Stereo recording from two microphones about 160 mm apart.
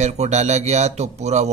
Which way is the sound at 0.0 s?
45° right (ahead or behind).